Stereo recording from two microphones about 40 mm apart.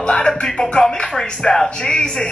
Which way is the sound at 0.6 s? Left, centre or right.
Centre.